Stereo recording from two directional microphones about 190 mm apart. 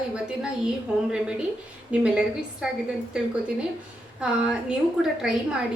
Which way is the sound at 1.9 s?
5° right (ahead or behind).